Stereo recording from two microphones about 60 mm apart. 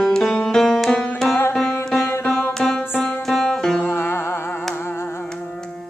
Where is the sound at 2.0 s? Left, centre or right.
Left.